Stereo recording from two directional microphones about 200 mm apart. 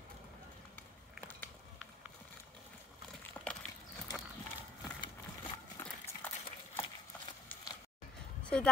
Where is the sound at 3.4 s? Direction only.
15° left (ahead or behind).